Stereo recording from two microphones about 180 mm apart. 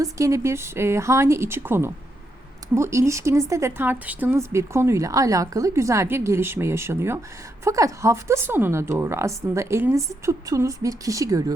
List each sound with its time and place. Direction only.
0.0 s a woman's voice: 15° right (ahead or behind)